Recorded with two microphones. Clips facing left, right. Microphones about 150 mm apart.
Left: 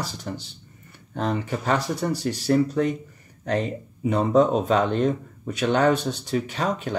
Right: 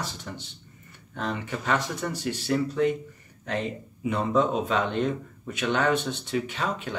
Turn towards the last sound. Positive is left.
turn(degrees=40)  # may be behind; listen again after turning